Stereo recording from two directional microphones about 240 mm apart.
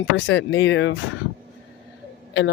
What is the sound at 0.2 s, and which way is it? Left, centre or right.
Speech, left.